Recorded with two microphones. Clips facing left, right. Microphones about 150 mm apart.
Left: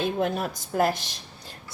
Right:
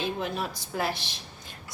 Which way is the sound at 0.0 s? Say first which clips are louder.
Left 5 dB; 50° left (ahead or behind).